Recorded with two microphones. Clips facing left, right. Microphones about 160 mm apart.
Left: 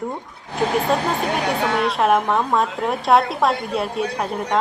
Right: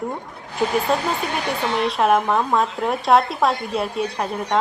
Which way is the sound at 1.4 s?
60° left (ahead or behind).